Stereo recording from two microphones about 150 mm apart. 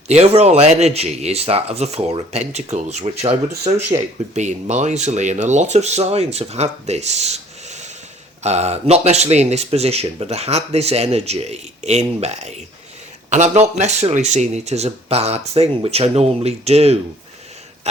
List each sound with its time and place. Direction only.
0.1 s speech: 45° right (ahead or behind)